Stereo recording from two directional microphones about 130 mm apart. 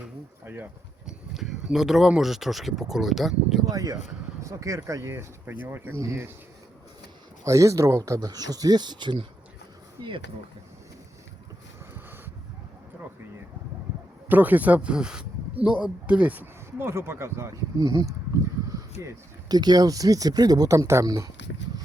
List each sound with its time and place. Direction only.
0.4 s speech: 15° right (ahead or behind)
1.0 s speech: 5° right (ahead or behind)
3.7 s speech: 25° right (ahead or behind)
7.4 s speech: 25° right (ahead or behind)
14.3 s speech: 15° right (ahead or behind)